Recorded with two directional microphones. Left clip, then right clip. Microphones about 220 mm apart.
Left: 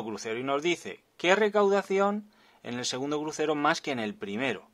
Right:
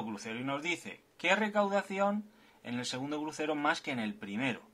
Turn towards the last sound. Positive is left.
turn(degrees=50)  # may be behind; listen again after turning